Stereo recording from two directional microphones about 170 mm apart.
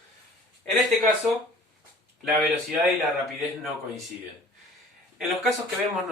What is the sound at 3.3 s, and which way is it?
Speech, centre (ahead or behind).